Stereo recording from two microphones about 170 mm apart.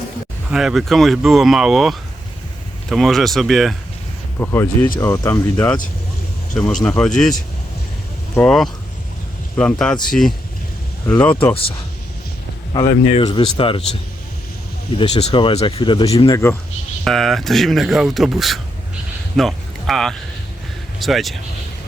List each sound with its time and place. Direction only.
0.5 s speech: centre (ahead or behind)
4.4 s speech: 10° left (ahead or behind)
11.3 s speech: 30° left (ahead or behind)
13.1 s speech: 30° left (ahead or behind)
14.9 s speech: 40° left (ahead or behind)
16.3 s speech: 15° left (ahead or behind)
17.0 s speech: centre (ahead or behind)